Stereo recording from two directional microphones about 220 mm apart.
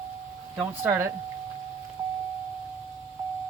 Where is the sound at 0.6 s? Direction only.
10° right (ahead or behind).